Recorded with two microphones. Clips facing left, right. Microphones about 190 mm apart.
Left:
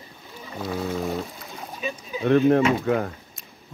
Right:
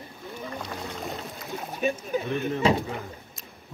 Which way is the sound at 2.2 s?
70° left (ahead or behind).